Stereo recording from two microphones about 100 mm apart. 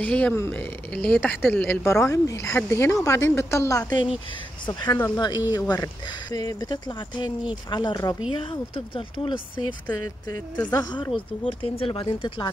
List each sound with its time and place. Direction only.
0.0 s speech: 15° left (ahead or behind)
1.9 s speech: 30° left (ahead or behind)
3.9 s speech: 55° left (ahead or behind)
8.3 s speech: 60° left (ahead or behind)
9.9 s speech: 35° left (ahead or behind)
11.1 s speech: 65° left (ahead or behind)